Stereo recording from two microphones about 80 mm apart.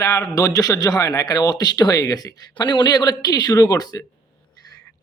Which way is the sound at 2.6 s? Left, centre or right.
Left.